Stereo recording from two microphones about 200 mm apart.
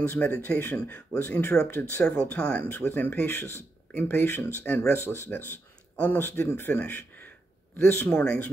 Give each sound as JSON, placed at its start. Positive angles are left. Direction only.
{"t": 0.0, "sound": "a man's voice", "side_deg": 10}